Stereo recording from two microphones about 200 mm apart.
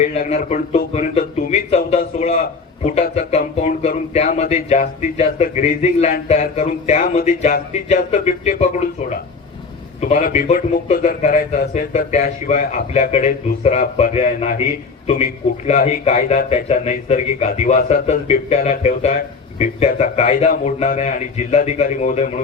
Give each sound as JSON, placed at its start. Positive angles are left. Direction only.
{"t": 0.0, "sound": "a man's voice", "side_deg": 35}
{"t": 1.2, "sound": "a sound", "side_deg": 35}
{"t": 2.8, "sound": "a man's voice", "side_deg": 35}